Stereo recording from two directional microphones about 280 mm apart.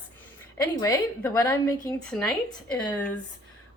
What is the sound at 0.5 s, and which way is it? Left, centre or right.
A woman's voice, centre.